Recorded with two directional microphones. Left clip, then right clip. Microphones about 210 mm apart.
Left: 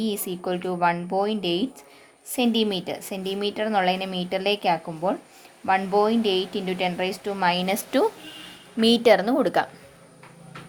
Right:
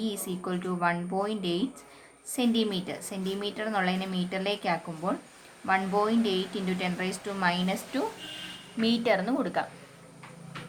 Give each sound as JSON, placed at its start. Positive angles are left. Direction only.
{"t": 0.0, "sound": "a woman's voice", "side_deg": 30}